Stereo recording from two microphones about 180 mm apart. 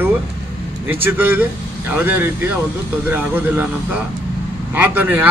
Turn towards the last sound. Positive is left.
turn(degrees=-10)  # may be behind; listen again after turning